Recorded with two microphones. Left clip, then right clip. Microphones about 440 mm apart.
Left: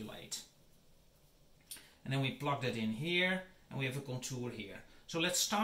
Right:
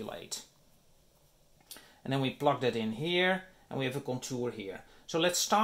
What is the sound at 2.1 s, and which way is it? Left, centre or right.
Speech, centre.